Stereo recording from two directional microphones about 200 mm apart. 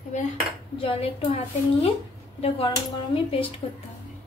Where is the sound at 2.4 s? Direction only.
25° left (ahead or behind).